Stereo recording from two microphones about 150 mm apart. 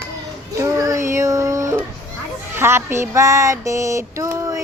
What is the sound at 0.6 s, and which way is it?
Child singing, 20° right (ahead or behind).